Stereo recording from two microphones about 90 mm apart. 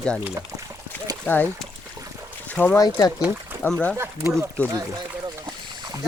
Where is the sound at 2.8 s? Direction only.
45° left (ahead or behind).